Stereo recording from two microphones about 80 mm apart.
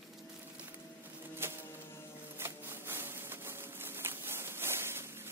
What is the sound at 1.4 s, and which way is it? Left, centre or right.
Music, right.